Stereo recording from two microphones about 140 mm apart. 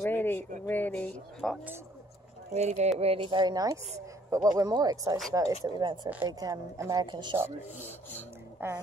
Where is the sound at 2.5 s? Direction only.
50° right (ahead or behind); by 7.4 s 35° right (ahead or behind).